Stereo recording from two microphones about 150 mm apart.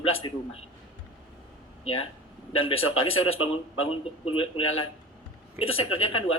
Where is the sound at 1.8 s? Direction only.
40° left (ahead or behind).